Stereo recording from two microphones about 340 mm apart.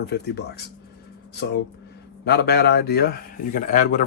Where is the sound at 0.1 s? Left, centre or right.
Left.